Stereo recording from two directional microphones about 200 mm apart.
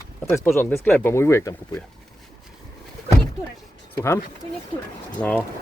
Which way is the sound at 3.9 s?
15° left (ahead or behind).